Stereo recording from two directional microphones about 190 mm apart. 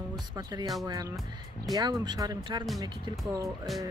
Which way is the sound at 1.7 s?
20° right (ahead or behind).